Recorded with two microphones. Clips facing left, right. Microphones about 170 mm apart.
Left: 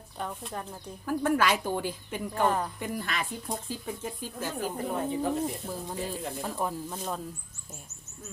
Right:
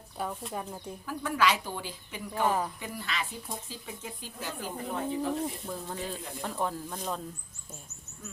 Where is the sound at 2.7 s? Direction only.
50° left (ahead or behind).